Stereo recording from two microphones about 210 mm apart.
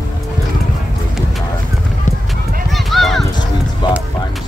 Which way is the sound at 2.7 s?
Centre (ahead or behind).